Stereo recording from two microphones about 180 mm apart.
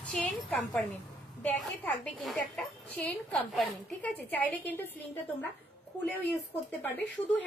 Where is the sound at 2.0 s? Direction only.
Centre (ahead or behind).